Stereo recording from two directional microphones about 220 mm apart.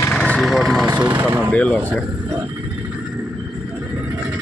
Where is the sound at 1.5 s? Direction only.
5° left (ahead or behind).